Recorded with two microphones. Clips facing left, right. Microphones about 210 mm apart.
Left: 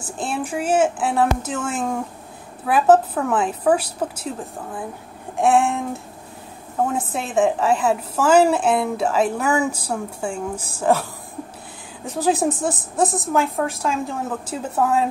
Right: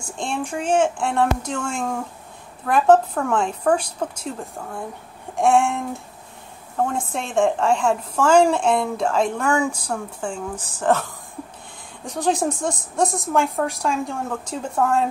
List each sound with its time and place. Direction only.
0.0 s a woman's voice: 5° left (ahead or behind)